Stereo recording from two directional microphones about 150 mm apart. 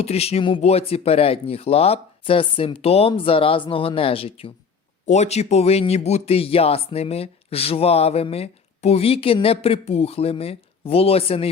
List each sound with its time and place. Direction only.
0.0 s speech: 45° left (ahead or behind)
5.0 s speech: 50° left (ahead or behind)